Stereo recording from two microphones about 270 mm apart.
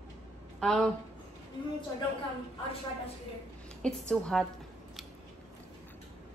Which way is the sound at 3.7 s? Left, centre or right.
Centre.